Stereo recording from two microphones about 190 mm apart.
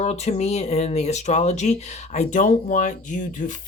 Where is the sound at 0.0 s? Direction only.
35° left (ahead or behind).